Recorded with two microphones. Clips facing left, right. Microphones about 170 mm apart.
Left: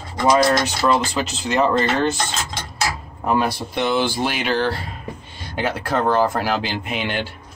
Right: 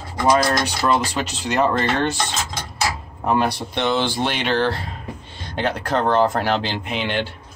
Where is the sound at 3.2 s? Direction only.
Centre (ahead or behind).